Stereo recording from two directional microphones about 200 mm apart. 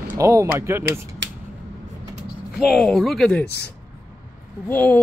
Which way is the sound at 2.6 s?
Centre (ahead or behind).